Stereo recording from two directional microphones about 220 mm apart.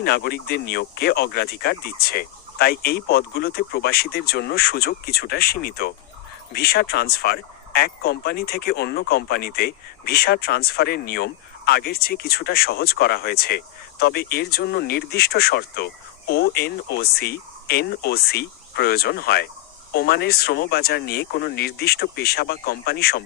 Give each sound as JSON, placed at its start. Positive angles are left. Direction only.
{"t": 0.0, "sound": "speech", "side_deg": 45}